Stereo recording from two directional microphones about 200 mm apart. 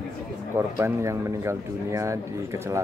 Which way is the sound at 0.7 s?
15° right (ahead or behind).